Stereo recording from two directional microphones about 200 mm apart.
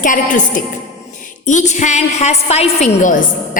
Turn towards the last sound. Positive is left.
turn(degrees=40)  # may be behind; listen again after turning